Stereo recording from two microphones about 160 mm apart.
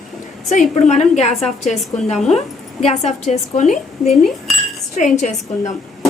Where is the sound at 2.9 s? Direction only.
45° left (ahead or behind).